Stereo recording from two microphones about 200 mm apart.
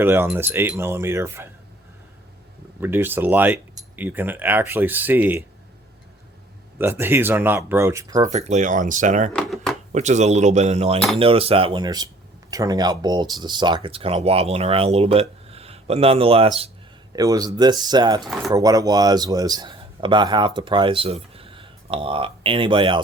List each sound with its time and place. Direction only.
0.0 s speech: 10° right (ahead or behind)
2.8 s speech: 10° right (ahead or behind)
6.7 s speech: 10° right (ahead or behind)
8.3 s speech: 35° right (ahead or behind)
9.3 s a sound: centre (ahead or behind)
9.9 s speech: 35° right (ahead or behind)
17.2 s a man's voice: 15° right (ahead or behind)